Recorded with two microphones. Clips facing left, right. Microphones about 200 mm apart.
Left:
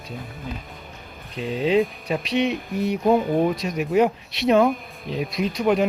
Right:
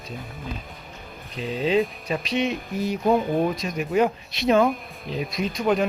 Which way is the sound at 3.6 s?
70° left (ahead or behind).